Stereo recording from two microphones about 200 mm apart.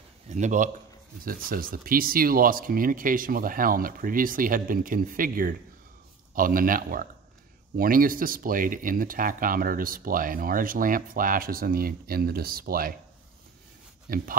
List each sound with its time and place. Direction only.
0.3 s speech: 35° right (ahead or behind)
14.0 s speech: 45° right (ahead or behind)